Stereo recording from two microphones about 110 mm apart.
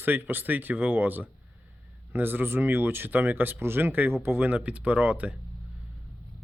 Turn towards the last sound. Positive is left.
turn(degrees=-15)  # may be behind; listen again after turning